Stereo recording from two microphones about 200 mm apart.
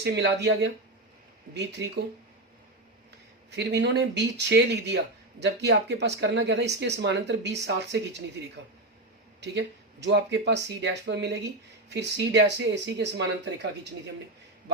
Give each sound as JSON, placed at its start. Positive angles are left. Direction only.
{"t": 0.0, "sound": "speech", "side_deg": -60}
{"t": 3.5, "sound": "speech", "side_deg": -60}
{"t": 9.4, "sound": "speech", "side_deg": -55}